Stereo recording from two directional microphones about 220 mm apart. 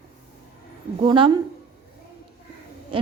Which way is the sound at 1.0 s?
25° right (ahead or behind).